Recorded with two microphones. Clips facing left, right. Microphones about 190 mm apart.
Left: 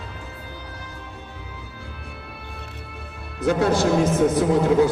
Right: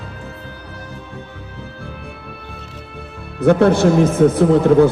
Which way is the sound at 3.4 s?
60° right (ahead or behind).